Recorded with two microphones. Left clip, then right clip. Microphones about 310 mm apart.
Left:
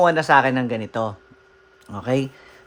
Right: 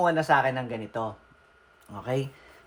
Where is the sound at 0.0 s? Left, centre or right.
Left.